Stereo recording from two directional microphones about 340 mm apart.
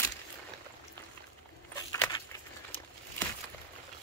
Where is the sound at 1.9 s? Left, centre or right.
Centre.